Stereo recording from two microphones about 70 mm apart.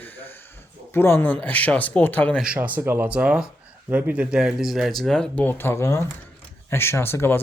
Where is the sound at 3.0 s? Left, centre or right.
Centre.